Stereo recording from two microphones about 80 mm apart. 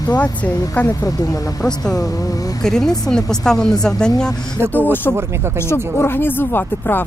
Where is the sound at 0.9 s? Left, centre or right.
Left.